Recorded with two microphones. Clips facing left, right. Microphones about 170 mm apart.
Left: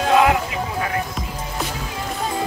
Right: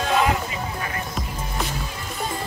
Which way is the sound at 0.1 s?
80° left.